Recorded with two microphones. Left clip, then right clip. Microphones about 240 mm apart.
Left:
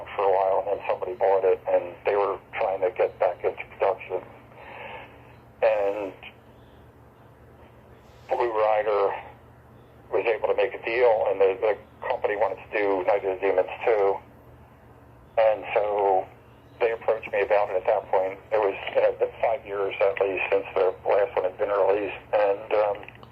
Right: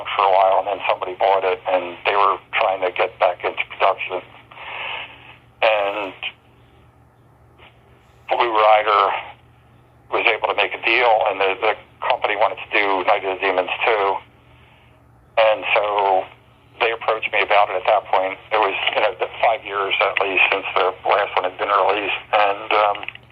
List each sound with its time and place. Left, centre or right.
0.0 s speech: right
4.6 s sanding: centre
5.5 s fart: right
8.3 s speech: right
10.1 s radio: right
10.4 s speech: right
15.4 s a sound: right
18.5 s speech: right